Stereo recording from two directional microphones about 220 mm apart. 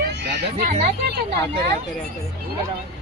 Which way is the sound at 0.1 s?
50° right (ahead or behind).